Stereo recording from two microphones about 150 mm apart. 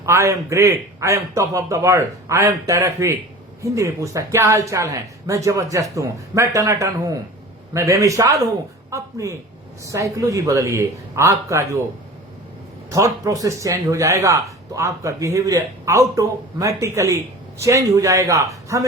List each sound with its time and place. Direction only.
0.0 s speech: 20° right (ahead or behind)
12.9 s speech: 20° right (ahead or behind)